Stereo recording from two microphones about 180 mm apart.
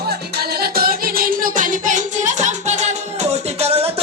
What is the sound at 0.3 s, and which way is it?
Music, 60° right (ahead or behind).